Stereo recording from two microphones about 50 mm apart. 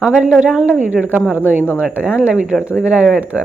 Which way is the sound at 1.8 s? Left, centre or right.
Right.